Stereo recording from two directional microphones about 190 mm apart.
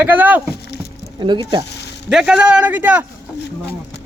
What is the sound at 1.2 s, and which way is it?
Speech, 25° right (ahead or behind).